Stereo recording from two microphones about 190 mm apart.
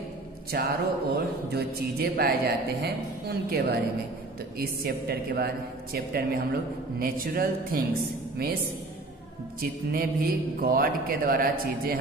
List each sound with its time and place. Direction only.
0.5 s a man's voice: 55° right (ahead or behind)
9.6 s a man's voice: 50° right (ahead or behind)